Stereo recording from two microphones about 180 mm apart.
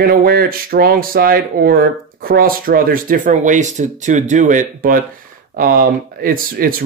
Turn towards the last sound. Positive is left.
turn(degrees=-55)  # may be behind; listen again after turning